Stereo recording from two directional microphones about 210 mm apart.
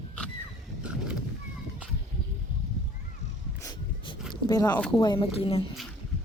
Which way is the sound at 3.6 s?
15° left (ahead or behind).